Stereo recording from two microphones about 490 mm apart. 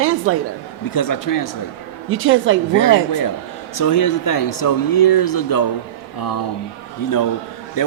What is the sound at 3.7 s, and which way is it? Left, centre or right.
Speech, left.